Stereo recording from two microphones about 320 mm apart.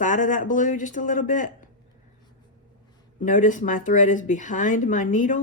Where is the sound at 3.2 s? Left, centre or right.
Left.